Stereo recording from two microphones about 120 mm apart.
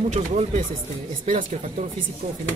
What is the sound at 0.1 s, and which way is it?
Speech, 80° right.